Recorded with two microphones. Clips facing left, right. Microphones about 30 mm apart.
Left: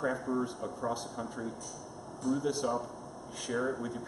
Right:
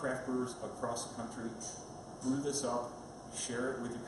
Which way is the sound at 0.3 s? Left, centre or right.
Left.